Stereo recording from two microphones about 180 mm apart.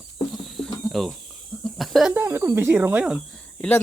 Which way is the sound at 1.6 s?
Centre (ahead or behind).